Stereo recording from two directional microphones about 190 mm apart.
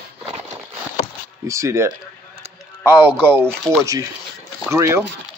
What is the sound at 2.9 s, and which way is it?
Speech, 10° right (ahead or behind).